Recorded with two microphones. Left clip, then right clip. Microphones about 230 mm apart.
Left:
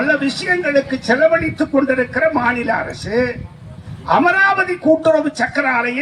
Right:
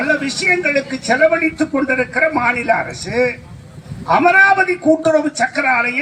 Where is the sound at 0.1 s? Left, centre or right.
Left.